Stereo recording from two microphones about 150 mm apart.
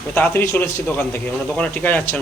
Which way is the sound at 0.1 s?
15° left (ahead or behind).